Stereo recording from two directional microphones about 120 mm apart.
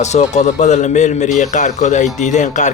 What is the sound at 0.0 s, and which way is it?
A man's voice, 70° left (ahead or behind).